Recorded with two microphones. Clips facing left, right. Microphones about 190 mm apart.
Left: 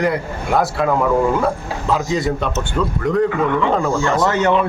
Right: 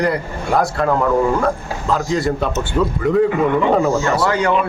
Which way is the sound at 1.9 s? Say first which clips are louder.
Right 1 dB; centre (ahead or behind).